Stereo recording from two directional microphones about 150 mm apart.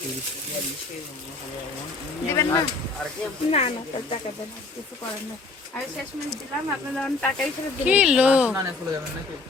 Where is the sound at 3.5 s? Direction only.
40° left (ahead or behind).